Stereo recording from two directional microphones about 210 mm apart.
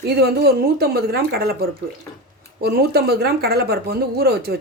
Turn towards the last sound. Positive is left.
turn(degrees=-50)  # may be behind; listen again after turning